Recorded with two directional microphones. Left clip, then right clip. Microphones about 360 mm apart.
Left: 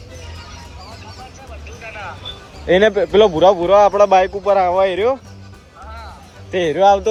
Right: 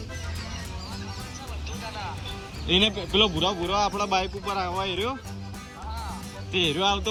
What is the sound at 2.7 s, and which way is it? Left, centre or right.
Speech, centre.